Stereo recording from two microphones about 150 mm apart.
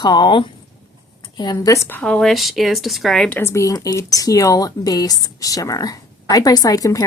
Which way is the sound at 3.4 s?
20° left (ahead or behind).